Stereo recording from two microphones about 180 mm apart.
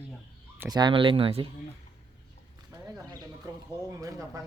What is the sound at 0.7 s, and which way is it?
Speech, 25° right (ahead or behind).